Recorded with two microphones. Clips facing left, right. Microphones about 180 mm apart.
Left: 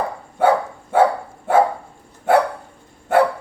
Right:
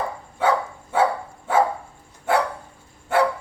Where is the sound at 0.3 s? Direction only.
55° left (ahead or behind).